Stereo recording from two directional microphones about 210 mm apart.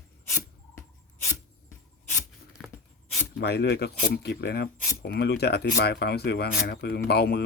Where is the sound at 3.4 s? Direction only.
50° left (ahead or behind).